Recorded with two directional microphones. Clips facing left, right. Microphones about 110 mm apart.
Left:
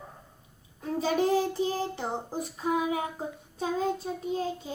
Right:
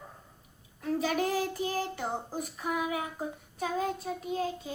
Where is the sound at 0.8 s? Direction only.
30° left (ahead or behind).